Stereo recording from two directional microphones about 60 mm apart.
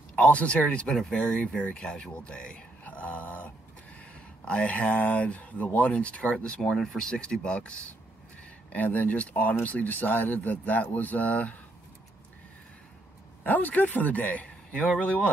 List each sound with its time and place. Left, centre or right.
0.1 s speech: left
2.8 s a sound: left
4.5 s speech: left
8.7 s speech: left
13.4 s speech: left